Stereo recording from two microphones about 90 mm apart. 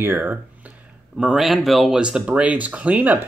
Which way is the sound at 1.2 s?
5° right (ahead or behind).